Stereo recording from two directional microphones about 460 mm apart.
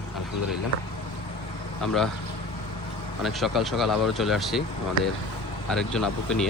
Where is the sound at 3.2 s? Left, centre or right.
Centre.